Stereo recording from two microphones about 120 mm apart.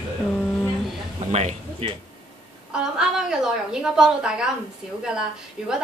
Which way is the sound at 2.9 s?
5° right (ahead or behind).